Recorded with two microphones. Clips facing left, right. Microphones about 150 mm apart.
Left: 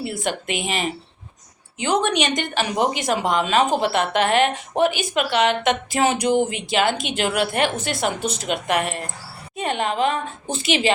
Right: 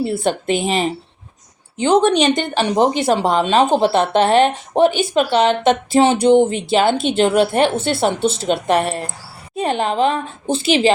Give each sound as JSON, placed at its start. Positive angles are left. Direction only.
{"t": 0.0, "sound": "speech", "side_deg": -30}